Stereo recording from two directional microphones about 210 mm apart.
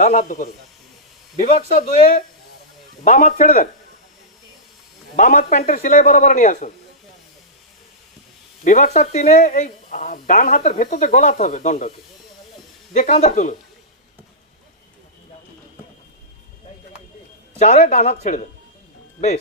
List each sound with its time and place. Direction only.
0.0 s a woman's voice: 35° left (ahead or behind)
1.8 s a woman's voice: 40° left (ahead or behind)
5.1 s a woman's voice: 40° left (ahead or behind)
8.6 s a woman's voice: 35° left (ahead or behind)
12.9 s a woman's voice: 35° left (ahead or behind)
17.6 s a woman's voice: 35° left (ahead or behind)